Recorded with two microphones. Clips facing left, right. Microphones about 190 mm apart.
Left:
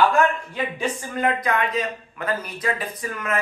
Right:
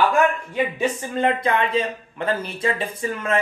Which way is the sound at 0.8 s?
25° right (ahead or behind).